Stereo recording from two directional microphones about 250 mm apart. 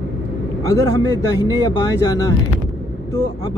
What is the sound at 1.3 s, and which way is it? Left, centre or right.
Speech, centre.